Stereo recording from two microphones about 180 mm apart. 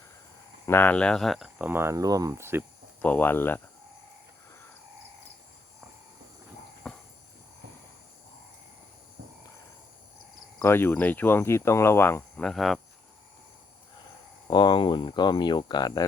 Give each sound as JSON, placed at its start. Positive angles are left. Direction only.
{"t": 0.6, "sound": "speech", "side_deg": 10}
{"t": 3.0, "sound": "speech", "side_deg": 10}
{"t": 6.8, "sound": "cricket", "side_deg": 5}
{"t": 10.6, "sound": "speech", "side_deg": 15}
{"t": 14.5, "sound": "speech", "side_deg": 25}